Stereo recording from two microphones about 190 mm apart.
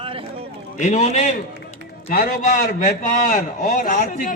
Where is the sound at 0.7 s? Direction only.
40° left (ahead or behind).